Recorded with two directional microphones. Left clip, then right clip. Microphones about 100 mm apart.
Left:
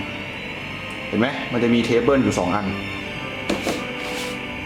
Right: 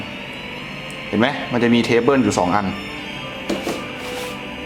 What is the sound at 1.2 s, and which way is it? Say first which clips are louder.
Speech: right 3 dB; 20° right (ahead or behind).